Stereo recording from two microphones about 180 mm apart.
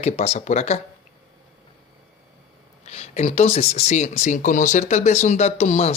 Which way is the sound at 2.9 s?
35° left (ahead or behind).